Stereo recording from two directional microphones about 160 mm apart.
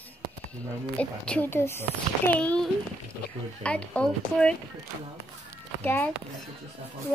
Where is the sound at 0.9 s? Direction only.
5° left (ahead or behind).